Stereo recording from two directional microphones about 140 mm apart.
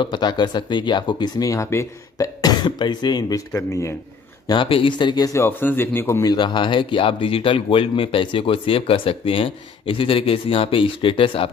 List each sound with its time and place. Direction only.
0.0 s speech: 35° left (ahead or behind)
4.5 s speech: 40° left (ahead or behind)